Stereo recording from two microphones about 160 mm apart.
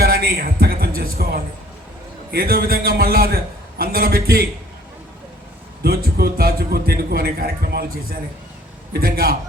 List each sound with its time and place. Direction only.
0.0 s a sound: 75° right (ahead or behind)
2.3 s a man's voice: 70° right (ahead or behind)
5.8 s a man's voice: 75° right (ahead or behind)
8.9 s a man's voice: 70° right (ahead or behind)